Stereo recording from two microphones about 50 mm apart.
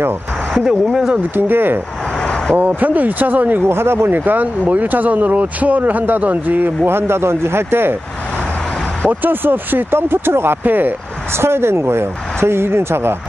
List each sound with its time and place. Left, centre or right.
0.6 s speech: centre
1.3 s speech: right
3.6 s speech: right
4.1 s speech: right
6.9 s speech: right
9.2 s speech: right
10.6 s speech: right
11.3 s speech: right